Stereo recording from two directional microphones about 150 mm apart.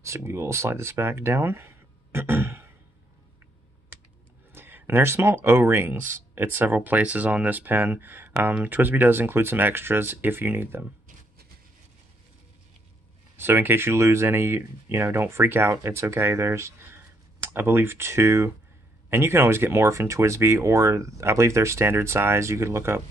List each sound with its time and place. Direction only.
0.0 s speech: 20° right (ahead or behind)
4.5 s speech: 15° right (ahead or behind)
13.4 s speech: 15° right (ahead or behind)